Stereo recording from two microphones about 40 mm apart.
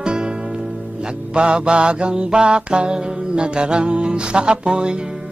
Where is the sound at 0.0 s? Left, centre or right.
Right.